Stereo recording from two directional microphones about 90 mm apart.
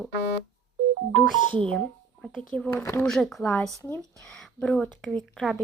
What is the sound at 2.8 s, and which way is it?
Speech, 30° left (ahead or behind).